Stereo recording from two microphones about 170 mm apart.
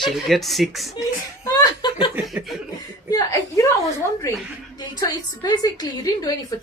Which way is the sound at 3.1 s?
20° left (ahead or behind).